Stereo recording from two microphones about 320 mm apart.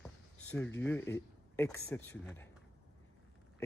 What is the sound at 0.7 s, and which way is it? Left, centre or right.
Speech, centre.